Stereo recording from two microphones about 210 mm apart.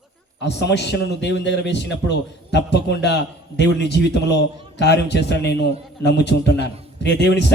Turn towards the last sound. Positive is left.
turn(degrees=55)  # may be behind; listen again after turning